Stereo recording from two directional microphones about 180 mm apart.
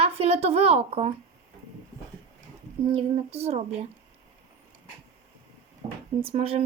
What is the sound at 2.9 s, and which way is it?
A woman's voice, 35° right (ahead or behind).